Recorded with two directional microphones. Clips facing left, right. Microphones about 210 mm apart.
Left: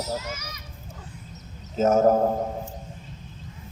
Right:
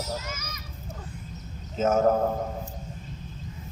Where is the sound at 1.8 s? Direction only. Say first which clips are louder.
Left 3 dB; 40° left (ahead or behind).